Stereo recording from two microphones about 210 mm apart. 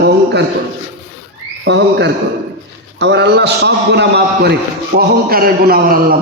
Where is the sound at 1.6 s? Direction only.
55° right (ahead or behind).